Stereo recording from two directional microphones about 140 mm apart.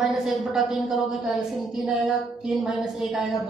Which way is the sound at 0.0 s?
5° right (ahead or behind).